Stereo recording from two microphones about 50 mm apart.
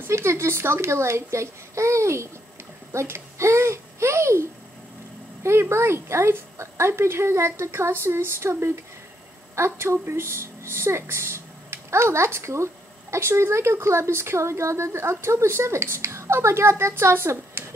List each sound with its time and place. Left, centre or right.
0.1 s speech: right
2.9 s babbling: right
5.4 s speech: right